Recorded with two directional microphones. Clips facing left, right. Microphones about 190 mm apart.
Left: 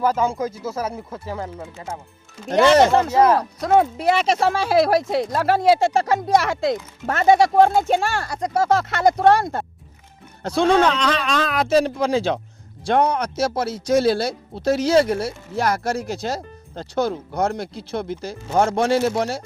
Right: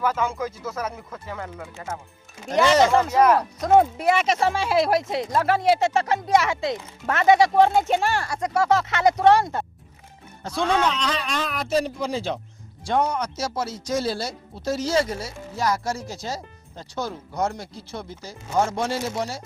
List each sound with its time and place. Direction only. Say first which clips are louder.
0.0 s speech: left 4 dB; 35° left (ahead or behind)
2.5 s speech: left 4 dB; 60° left (ahead or behind)
2.9 s speech: left 2 dB; 30° left (ahead or behind); by 8.3 s 50° left (ahead or behind)
8.4 s speech: left 2 dB; 40° left (ahead or behind)
10.4 s a man's voice: left 6 dB; 75° left (ahead or behind); by 12.4 s 90° left
12.8 s speech: left 4 dB; 60° left (ahead or behind)